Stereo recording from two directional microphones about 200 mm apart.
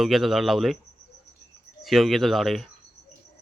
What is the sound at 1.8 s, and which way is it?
Speech, centre (ahead or behind).